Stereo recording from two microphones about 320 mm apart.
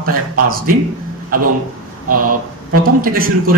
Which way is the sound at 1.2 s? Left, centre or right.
Right.